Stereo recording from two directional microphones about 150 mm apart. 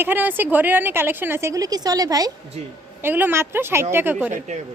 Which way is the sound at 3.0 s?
15° right (ahead or behind).